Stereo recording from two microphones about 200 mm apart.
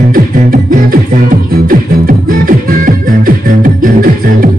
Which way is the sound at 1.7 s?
45° right (ahead or behind).